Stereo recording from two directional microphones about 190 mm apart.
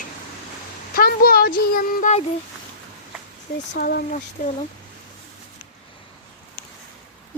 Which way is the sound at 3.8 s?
50° left (ahead or behind).